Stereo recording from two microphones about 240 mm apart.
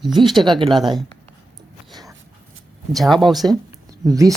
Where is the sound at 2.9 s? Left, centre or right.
Centre.